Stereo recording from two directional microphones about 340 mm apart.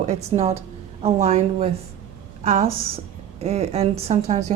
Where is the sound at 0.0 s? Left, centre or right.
Centre.